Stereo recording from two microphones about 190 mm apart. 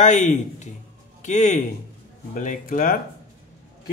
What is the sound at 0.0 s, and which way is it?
Speech, 40° left (ahead or behind).